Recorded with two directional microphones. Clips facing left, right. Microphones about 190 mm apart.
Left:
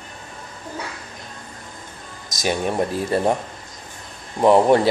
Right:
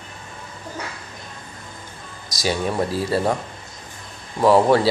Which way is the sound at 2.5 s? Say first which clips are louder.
Left 1 dB; 20° left (ahead or behind).